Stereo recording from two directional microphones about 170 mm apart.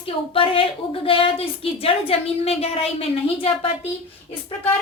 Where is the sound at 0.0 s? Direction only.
30° left (ahead or behind).